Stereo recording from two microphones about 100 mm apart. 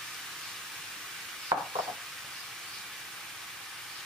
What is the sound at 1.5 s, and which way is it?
Stir, 35° right (ahead or behind).